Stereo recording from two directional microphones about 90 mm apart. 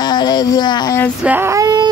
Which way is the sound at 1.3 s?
20° right (ahead or behind).